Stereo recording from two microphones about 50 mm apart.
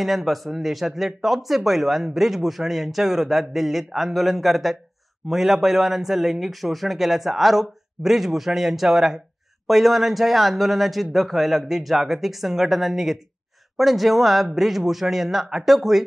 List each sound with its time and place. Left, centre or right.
0.0 s speech: centre